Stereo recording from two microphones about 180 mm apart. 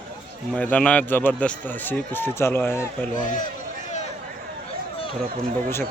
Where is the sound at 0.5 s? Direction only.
10° left (ahead or behind).